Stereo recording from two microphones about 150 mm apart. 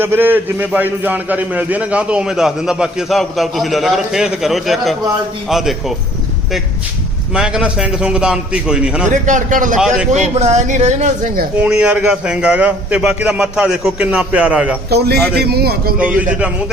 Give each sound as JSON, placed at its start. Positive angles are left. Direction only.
{"t": 0.0, "sound": "a man's voice", "side_deg": -15}
{"t": 7.3, "sound": "a man's voice", "side_deg": -5}
{"t": 9.2, "sound": "a man's voice", "side_deg": -55}
{"t": 9.7, "sound": "a man's voice", "side_deg": -5}
{"t": 10.3, "sound": "a woman's voice", "side_deg": -50}
{"t": 11.6, "sound": "a man's voice", "side_deg": -5}
{"t": 14.8, "sound": "a man's voice", "side_deg": -90}
{"t": 16.0, "sound": "a man's voice", "side_deg": -10}